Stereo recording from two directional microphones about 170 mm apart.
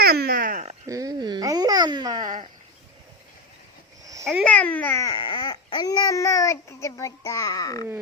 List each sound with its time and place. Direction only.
0.0 s a sound: 65° right (ahead or behind); by 0.8 s 45° right (ahead or behind)
0.9 s babbling: 20° right (ahead or behind)
4.4 s speech: 10° left (ahead or behind)